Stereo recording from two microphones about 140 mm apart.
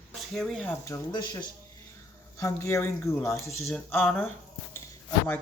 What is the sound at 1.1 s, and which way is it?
Speech, 35° left (ahead or behind).